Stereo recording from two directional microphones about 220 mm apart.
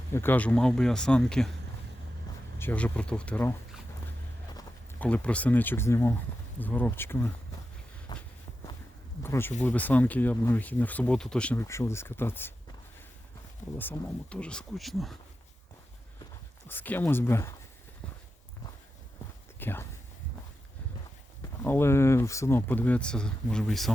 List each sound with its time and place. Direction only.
0.1 s speech: 10° left (ahead or behind)
2.6 s speech: 5° left (ahead or behind)
8.1 s walk: 20° left (ahead or behind)
9.2 s speech: 10° left (ahead or behind)
13.7 s speech: 10° left (ahead or behind)
16.6 s speech: 10° left (ahead or behind)
19.5 s a sound: 10° left (ahead or behind)
21.6 s speech: 10° left (ahead or behind)